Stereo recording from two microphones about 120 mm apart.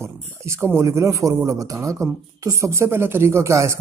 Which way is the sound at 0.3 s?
20° right (ahead or behind).